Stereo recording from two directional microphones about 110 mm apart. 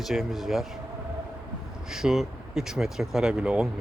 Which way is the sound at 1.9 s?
5° right (ahead or behind).